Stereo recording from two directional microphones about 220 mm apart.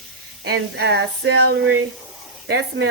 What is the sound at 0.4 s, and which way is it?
A woman's voice, 45° right (ahead or behind).